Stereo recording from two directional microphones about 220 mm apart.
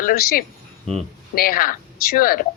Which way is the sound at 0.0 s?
40° left (ahead or behind).